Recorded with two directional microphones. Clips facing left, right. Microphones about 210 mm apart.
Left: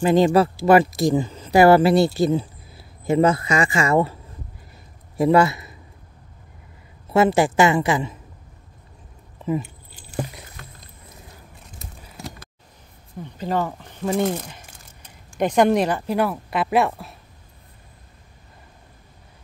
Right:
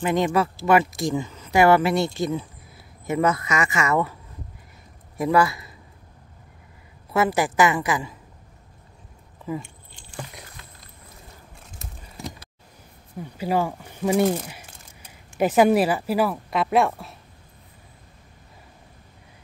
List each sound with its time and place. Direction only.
0.0 s a man's voice: 30° left (ahead or behind)
7.1 s a woman's voice: 25° left (ahead or behind)
13.2 s speech: 10° right (ahead or behind)